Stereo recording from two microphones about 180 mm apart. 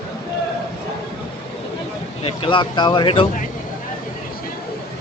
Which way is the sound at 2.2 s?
30° left (ahead or behind).